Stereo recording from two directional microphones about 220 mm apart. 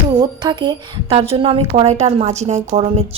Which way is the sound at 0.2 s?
20° right (ahead or behind).